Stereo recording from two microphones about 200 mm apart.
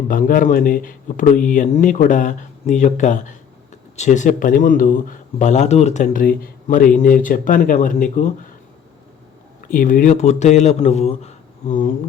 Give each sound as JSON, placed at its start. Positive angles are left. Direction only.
{"t": 0.1, "sound": "speech", "side_deg": 45}
{"t": 9.6, "sound": "speech", "side_deg": 40}